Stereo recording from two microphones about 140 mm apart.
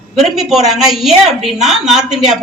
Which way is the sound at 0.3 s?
Centre (ahead or behind).